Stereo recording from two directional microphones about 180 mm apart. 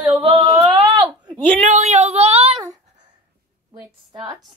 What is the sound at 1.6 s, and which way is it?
Speech, 40° right (ahead or behind).